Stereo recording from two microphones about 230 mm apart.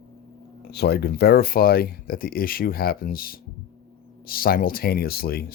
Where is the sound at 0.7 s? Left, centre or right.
Left.